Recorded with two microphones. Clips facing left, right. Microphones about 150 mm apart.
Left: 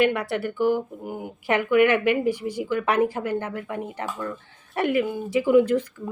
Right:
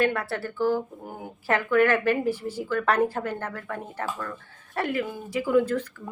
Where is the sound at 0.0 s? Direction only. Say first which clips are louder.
Left 3 dB; 15° left (ahead or behind).